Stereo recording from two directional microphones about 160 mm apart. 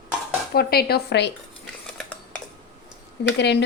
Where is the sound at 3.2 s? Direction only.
90° left.